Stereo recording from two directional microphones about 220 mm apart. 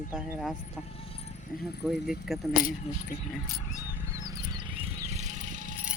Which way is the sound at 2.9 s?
30° left (ahead or behind).